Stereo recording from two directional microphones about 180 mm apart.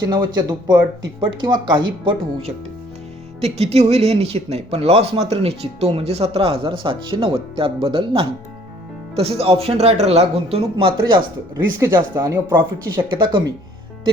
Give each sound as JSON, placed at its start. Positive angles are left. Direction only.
{"t": 0.1, "sound": "speech", "side_deg": -25}